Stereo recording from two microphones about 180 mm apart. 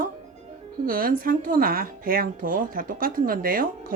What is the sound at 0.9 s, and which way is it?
Speech, 55° right (ahead or behind).